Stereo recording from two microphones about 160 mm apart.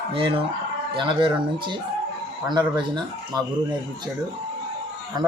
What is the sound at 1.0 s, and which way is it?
Speech, 30° right (ahead or behind).